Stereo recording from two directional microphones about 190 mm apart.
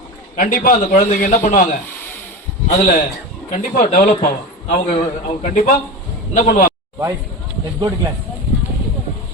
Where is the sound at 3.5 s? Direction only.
40° left (ahead or behind).